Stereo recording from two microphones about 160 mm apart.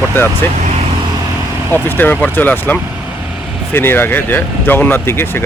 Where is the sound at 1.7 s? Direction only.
10° left (ahead or behind).